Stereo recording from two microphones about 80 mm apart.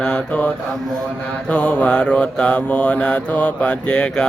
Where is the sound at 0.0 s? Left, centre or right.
Centre.